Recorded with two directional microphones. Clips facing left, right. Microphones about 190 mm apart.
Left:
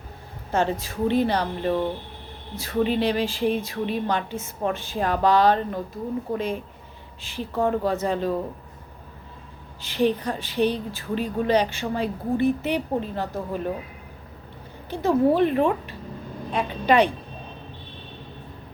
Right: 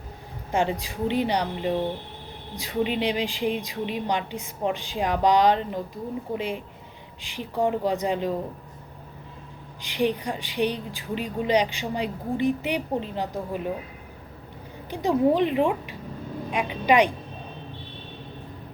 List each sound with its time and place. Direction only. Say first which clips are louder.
0.5 s a woman's voice: left 1 dB; 15° right (ahead or behind)
9.8 s a woman's voice: left 2 dB; 15° right (ahead or behind)
14.8 s a woman's voice: left 1 dB; 15° right (ahead or behind)